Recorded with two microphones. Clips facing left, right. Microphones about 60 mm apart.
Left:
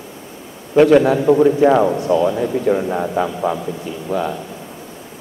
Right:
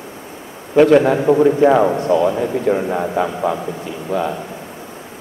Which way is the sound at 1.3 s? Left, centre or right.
Centre.